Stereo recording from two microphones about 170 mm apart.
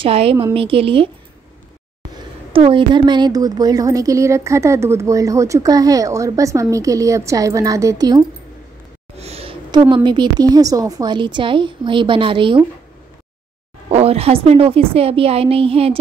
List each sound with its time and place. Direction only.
0.0 s a woman's voice: 35° right (ahead or behind)
2.5 s a woman's voice: 30° right (ahead or behind)
9.1 s a woman's voice: 40° right (ahead or behind)
13.8 s a woman's voice: 35° right (ahead or behind)